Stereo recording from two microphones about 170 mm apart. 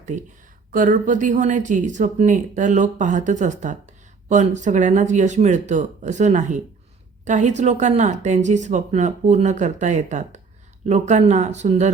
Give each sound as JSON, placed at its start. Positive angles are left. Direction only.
{"t": 0.0, "sound": "speech", "side_deg": -45}